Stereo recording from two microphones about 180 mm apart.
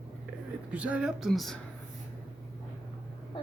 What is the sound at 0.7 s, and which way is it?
Speech, 5° right (ahead or behind).